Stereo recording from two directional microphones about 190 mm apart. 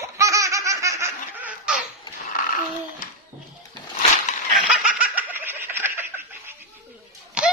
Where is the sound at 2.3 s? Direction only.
45° left (ahead or behind).